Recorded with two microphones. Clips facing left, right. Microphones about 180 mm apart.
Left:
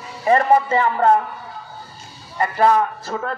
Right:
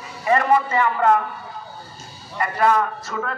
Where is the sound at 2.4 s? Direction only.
30° left (ahead or behind).